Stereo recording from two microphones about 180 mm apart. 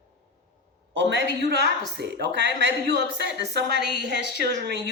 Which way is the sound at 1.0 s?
80° right.